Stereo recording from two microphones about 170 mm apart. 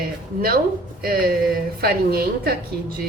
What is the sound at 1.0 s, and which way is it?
A woman's voice, 60° right (ahead or behind).